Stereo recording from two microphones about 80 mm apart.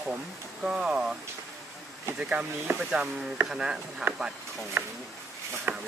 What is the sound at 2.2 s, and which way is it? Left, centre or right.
Speech, centre.